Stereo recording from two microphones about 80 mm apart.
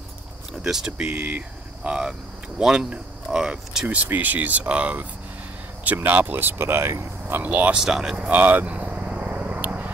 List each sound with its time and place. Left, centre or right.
0.6 s speech: centre
2.6 s speech: centre
8.3 s a sound: right